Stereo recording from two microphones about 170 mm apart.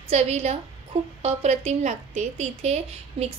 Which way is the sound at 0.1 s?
40° right (ahead or behind).